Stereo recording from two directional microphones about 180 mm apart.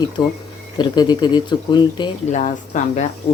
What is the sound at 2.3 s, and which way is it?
Speech, 40° left (ahead or behind).